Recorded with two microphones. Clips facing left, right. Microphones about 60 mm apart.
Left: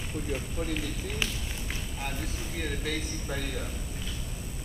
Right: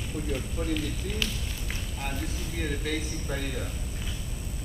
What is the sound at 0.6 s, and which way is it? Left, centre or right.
A man's voice, centre.